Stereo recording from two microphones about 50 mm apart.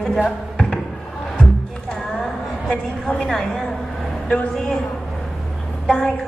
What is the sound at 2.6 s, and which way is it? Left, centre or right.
Speech, left.